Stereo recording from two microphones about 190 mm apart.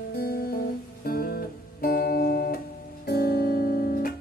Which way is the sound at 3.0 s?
55° left (ahead or behind).